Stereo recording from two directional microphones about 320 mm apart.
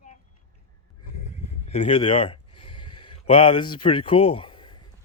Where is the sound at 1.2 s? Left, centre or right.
Centre.